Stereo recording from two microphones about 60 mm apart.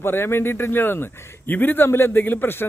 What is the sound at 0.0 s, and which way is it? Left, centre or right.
Speech, left.